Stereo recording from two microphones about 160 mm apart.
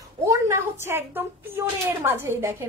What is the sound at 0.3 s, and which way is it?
A woman's voice, 15° right (ahead or behind).